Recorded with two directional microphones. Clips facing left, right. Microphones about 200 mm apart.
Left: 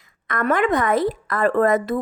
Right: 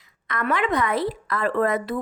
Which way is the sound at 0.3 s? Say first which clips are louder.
Left 4 dB; 50° left (ahead or behind).